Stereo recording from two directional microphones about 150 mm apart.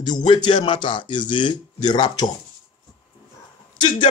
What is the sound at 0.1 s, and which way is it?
Speech, 30° left (ahead or behind).